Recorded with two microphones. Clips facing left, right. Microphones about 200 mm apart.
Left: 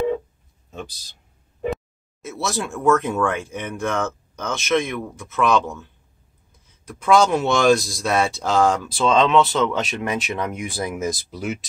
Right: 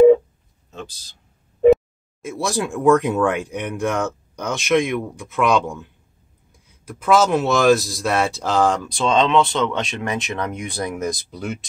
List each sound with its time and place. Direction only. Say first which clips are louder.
2.2 s speech: right 3 dB; 15° right (ahead or behind); by 11.6 s 5° left (ahead or behind)